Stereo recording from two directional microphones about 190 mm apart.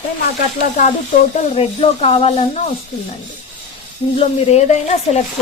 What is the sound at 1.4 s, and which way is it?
Speech, 35° left (ahead or behind).